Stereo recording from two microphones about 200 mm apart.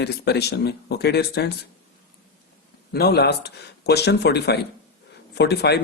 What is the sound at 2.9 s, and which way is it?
Speech, 55° left (ahead or behind).